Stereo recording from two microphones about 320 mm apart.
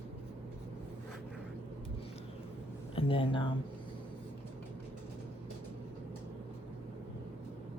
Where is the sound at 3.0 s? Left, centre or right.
Centre.